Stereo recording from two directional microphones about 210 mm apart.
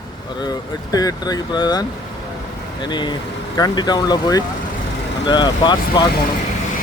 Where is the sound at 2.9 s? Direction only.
20° left (ahead or behind).